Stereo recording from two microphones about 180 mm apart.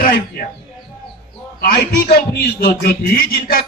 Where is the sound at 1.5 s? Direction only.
60° left (ahead or behind).